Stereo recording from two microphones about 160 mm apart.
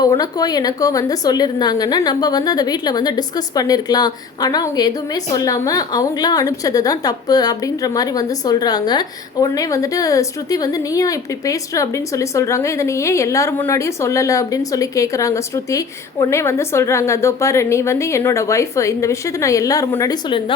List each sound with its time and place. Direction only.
0.0 s a woman's voice: 25° left (ahead or behind)